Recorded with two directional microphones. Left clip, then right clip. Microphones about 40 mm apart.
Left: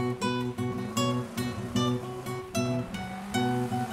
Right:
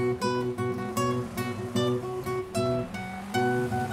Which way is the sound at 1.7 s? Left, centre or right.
Centre.